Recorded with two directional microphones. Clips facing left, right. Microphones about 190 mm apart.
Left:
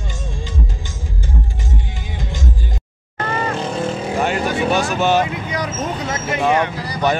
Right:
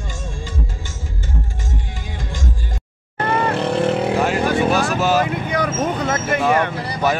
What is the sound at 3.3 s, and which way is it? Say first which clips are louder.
Vehicle: right 3 dB; 65° right (ahead or behind).